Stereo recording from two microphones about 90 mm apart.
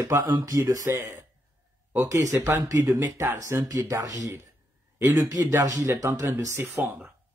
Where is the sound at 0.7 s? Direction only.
40° right (ahead or behind).